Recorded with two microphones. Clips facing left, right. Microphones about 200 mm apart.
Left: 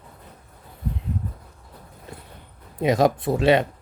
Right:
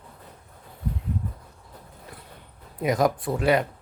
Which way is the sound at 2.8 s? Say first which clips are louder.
Left 3 dB; 25° left (ahead or behind).